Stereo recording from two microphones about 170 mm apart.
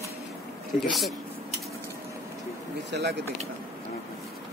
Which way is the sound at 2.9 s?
80° right.